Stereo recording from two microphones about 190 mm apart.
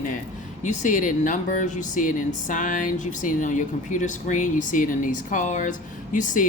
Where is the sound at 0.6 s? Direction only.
40° left (ahead or behind).